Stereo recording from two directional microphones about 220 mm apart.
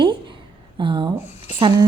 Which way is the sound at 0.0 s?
20° right (ahead or behind).